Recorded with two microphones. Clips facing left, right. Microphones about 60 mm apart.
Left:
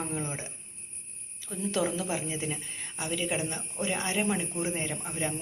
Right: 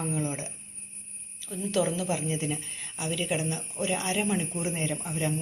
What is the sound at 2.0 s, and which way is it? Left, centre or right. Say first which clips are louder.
Speech: right 3 dB; left.